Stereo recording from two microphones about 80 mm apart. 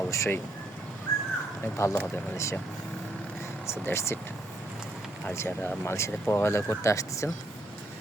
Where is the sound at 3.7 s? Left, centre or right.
Left.